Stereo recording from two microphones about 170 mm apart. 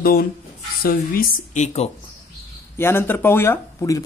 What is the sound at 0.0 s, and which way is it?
Speech, 60° left (ahead or behind).